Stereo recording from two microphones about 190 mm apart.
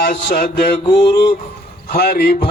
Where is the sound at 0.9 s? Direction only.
20° left (ahead or behind).